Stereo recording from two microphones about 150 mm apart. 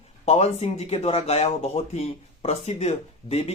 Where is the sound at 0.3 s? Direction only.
45° left (ahead or behind).